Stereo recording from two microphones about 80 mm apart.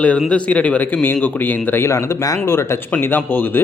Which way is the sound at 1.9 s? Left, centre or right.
Left.